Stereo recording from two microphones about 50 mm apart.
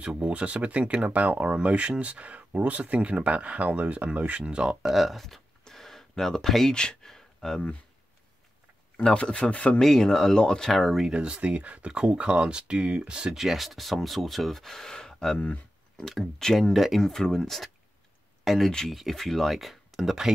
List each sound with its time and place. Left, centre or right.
0.0 s speech: right
4.8 s a sound: centre
6.7 s speech: centre
8.9 s speech: left
9.8 s speech: centre
10.7 s speech: centre
11.0 s speech: centre
13.4 s speech: centre
15.3 s speech: left
16.0 s speech: centre